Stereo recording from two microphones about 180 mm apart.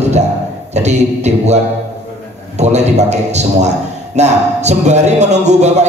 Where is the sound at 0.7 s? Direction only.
40° right (ahead or behind).